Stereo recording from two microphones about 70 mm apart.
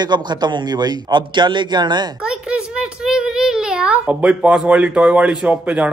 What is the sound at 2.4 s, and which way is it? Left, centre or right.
A child's voice, centre.